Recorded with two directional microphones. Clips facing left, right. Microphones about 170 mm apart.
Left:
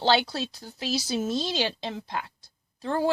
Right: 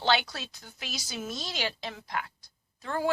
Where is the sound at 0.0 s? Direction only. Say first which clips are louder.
Left 4 dB; 30° left (ahead or behind).